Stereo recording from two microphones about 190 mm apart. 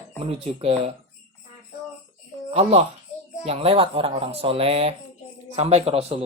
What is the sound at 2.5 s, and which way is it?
Speech, 35° right (ahead or behind).